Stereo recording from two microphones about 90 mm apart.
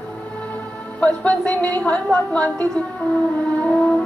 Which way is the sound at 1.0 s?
15° left (ahead or behind).